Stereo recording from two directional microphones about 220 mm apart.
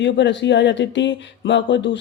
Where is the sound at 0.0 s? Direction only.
55° left (ahead or behind).